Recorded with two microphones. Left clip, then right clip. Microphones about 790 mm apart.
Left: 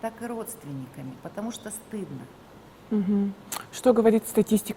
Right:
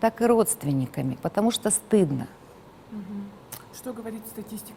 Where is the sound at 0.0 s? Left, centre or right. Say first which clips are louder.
Right 13 dB; right.